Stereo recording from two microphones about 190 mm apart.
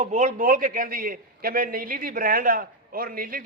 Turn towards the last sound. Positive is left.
turn(degrees=-50)  # may be behind; listen again after turning